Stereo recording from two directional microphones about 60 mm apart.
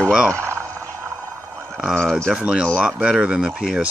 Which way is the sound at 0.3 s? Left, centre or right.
Right.